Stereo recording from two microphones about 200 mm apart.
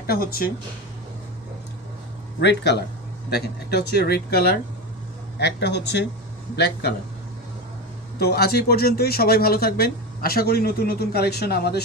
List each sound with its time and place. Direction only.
0.0 s speech: 50° left (ahead or behind)
2.4 s a man's voice: 55° left (ahead or behind)
8.2 s a man's voice: 50° left (ahead or behind)